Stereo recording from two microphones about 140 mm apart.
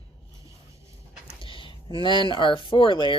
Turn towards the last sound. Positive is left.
turn(degrees=35)  # may be behind; listen again after turning